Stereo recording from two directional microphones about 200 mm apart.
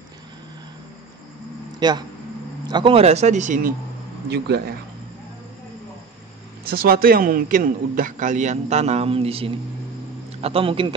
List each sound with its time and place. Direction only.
1.7 s a sound: 20° right (ahead or behind)
2.6 s a man's voice: 25° right (ahead or behind); by 3.7 s 40° right (ahead or behind)
4.3 s speech: 55° right (ahead or behind)
6.7 s a man's voice: 50° right (ahead or behind); by 11.0 s 25° right (ahead or behind)